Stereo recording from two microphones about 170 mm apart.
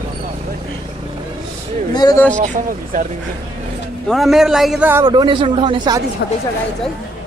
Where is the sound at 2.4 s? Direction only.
50° right (ahead or behind).